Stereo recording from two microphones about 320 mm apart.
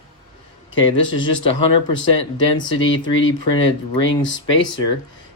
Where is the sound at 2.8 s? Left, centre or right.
Left.